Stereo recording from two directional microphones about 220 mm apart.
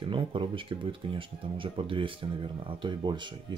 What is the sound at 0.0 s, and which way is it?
Speech, 20° right (ahead or behind).